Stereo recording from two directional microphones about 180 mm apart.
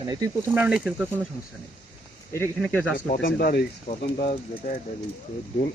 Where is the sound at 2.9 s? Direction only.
55° left (ahead or behind).